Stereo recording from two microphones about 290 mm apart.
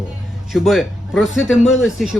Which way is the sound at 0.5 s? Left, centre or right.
Centre.